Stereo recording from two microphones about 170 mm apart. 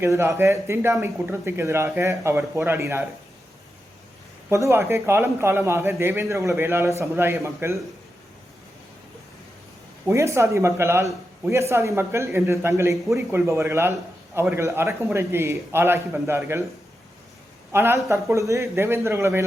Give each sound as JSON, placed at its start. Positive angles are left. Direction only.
{"t": 0.0, "sound": "a man's voice", "side_deg": -15}
{"t": 4.4, "sound": "a man's voice", "side_deg": -15}
{"t": 10.1, "sound": "a man's voice", "side_deg": -15}
{"t": 17.7, "sound": "a man's voice", "side_deg": -15}